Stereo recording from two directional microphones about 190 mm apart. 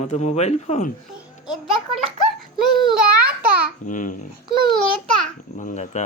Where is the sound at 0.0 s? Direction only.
35° left (ahead or behind).